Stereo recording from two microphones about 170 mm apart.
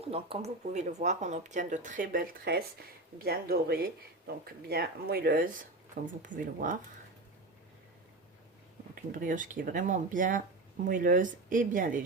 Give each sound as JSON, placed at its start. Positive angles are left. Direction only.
{"t": 0.1, "sound": "speech", "side_deg": -35}
{"t": 9.1, "sound": "speech", "side_deg": -50}